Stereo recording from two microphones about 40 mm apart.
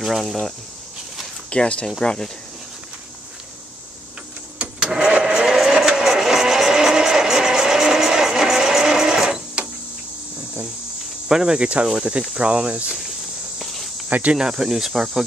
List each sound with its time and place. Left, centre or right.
0.0 s speech: centre
1.5 s speech: left
4.6 s a sound: right
5.2 s vehicle: centre
11.2 s speech: centre
13.6 s cricket: centre
14.0 s cricket: right
14.3 s speech: centre